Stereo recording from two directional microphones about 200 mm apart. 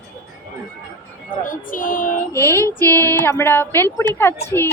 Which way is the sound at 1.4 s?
40° left (ahead or behind).